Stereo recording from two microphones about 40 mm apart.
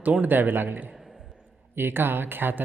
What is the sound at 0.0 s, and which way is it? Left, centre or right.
Speech, right.